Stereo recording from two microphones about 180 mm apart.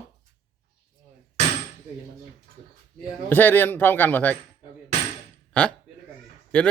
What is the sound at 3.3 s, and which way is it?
Speech, 10° left (ahead or behind).